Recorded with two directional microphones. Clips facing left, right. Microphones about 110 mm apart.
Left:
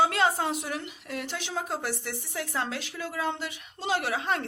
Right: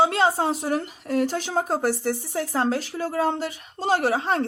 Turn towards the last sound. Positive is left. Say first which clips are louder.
# right 7 dB
turn(degrees=-35)  # may be behind; listen again after turning